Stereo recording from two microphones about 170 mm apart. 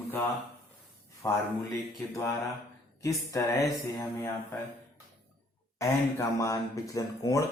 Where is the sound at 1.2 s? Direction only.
20° left (ahead or behind).